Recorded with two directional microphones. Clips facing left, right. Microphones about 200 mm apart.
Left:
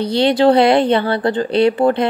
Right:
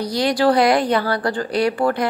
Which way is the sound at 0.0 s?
25° left (ahead or behind).